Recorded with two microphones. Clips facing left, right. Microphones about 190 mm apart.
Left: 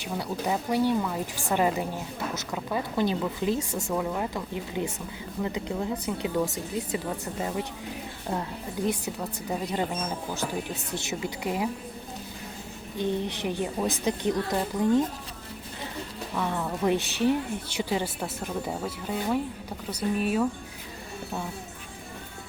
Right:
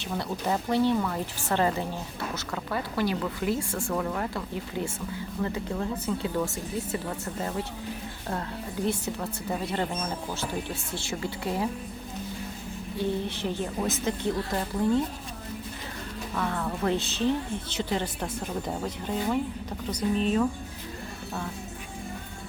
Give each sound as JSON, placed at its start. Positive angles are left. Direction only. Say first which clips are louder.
{"t": 0.0, "sound": "a woman's voice", "louder": "even", "side_deg": 10}
{"t": 8.9, "sound": "a woman's voice", "louder": "even", "side_deg": 15}
{"t": 10.9, "sound": "a woman's voice", "louder": "left 1 dB", "side_deg": 20}
{"t": 13.0, "sound": "a woman's voice", "louder": "left 1 dB", "side_deg": 20}
{"t": 16.3, "sound": "a woman's voice", "louder": "left 1 dB", "side_deg": 15}